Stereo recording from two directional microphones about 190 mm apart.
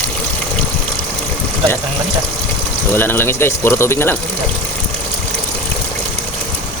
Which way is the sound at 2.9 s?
10° left (ahead or behind).